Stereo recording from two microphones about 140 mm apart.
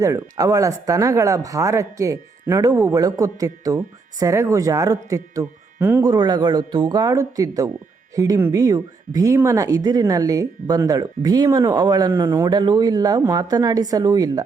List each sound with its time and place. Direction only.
0.0 s speech: 25° right (ahead or behind)